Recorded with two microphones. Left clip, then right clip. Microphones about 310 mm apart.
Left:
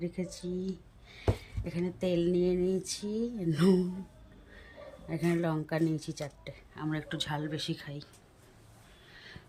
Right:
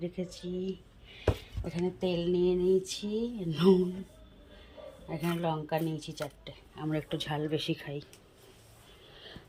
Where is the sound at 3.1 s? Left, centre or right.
Left.